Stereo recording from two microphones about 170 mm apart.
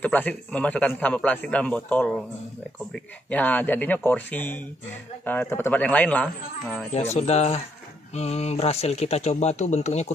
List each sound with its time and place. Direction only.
0.0 s a man's voice: 10° left (ahead or behind)
6.9 s speech: 40° left (ahead or behind)